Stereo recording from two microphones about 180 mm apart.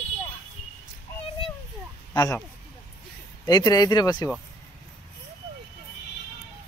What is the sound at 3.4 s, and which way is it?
Speech, 25° left (ahead or behind).